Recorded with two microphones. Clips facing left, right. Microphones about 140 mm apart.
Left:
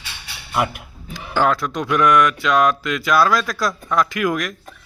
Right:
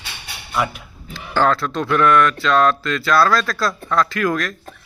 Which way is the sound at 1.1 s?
15° left (ahead or behind).